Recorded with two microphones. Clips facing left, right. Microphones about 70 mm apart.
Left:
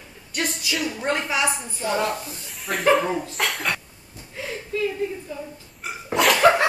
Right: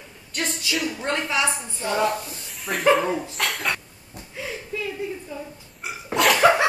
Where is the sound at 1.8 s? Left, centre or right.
Centre.